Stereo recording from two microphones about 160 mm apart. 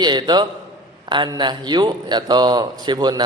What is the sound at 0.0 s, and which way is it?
A man's voice, 25° right (ahead or behind).